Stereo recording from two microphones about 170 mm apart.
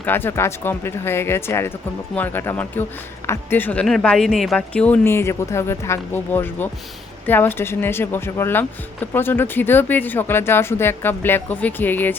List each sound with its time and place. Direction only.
0.0 s speech: 10° left (ahead or behind)